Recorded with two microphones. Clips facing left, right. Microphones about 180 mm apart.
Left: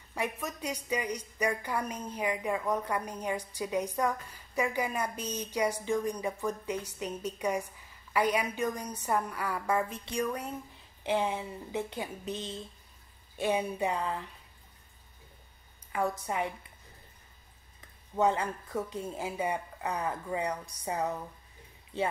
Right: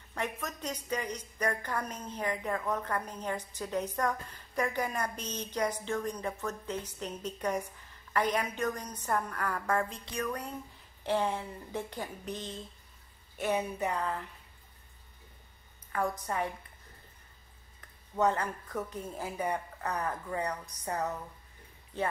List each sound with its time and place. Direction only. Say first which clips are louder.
0.1 s a woman's voice: left 2 dB; 10° left (ahead or behind)
13.4 s a woman's voice: left 2 dB; 15° left (ahead or behind)
15.9 s a woman's voice: left 1 dB; 15° left (ahead or behind)
18.1 s a woman's voice: left 1 dB; 10° left (ahead or behind)